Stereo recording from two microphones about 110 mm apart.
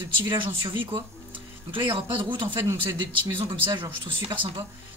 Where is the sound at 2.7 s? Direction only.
25° right (ahead or behind).